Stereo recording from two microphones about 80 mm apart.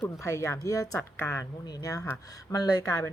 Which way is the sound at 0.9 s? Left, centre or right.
Left.